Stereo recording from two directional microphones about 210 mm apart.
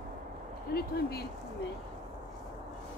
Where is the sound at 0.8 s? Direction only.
50° left (ahead or behind).